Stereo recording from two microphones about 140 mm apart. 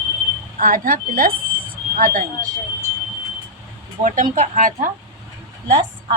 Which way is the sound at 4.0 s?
65° right (ahead or behind).